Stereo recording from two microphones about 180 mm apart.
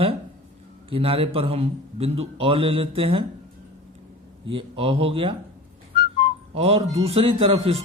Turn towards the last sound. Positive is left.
turn(degrees=-35)  # may be behind; listen again after turning